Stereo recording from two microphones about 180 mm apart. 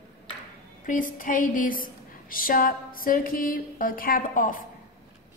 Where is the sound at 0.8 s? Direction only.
50° left (ahead or behind).